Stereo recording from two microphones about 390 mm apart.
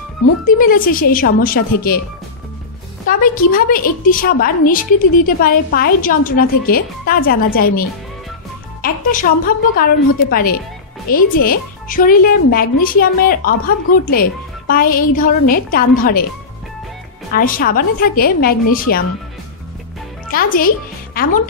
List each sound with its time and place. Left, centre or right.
0.6 s a woman's voice: left
3.1 s a woman's voice: left
17.3 s a woman's voice: left
20.2 s speech: left